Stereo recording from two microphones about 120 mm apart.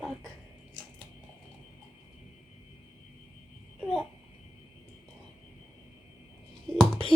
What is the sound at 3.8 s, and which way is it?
Babbling, centre (ahead or behind).